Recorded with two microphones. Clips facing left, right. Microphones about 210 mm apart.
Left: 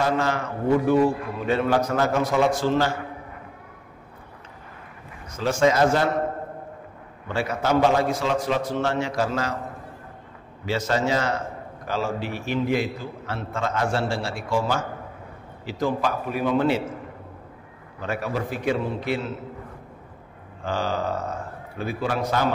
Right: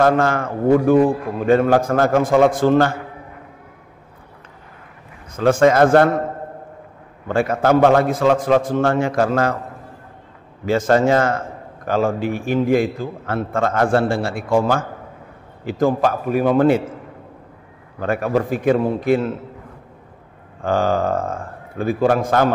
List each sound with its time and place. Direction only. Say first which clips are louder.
0.0 s a man's voice: right 7 dB; 50° right (ahead or behind)
5.3 s a man's voice: right 7 dB; 55° right (ahead or behind)
7.2 s a man's voice: right 8 dB; 50° right (ahead or behind)
10.6 s a man's voice: right 8 dB; 50° right (ahead or behind)
18.0 s a man's voice: right 8 dB; 50° right (ahead or behind)
20.6 s a man's voice: right 8 dB; 50° right (ahead or behind)